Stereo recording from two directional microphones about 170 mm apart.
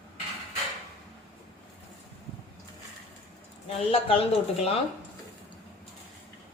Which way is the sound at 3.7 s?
35° left (ahead or behind).